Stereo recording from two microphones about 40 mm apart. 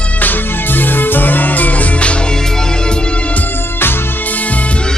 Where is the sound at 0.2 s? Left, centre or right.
Left.